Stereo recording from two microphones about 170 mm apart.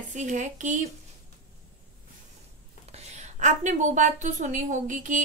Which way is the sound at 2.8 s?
40° right (ahead or behind).